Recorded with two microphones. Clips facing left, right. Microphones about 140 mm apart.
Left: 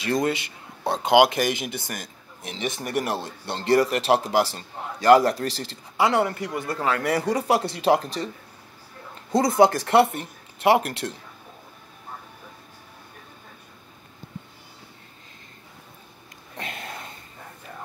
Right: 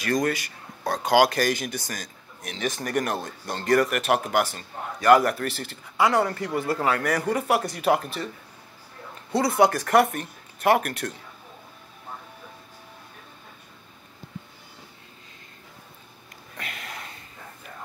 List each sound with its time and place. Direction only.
0.0 s speech: 25° left (ahead or behind)
6.5 s speech: 25° right (ahead or behind)
7.0 s speech: 30° left (ahead or behind)
9.3 s speech: 40° left (ahead or behind)
16.5 s sniff: 30° left (ahead or behind)